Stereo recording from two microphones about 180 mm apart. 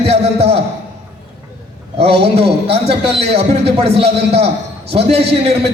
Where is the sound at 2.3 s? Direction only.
30° right (ahead or behind).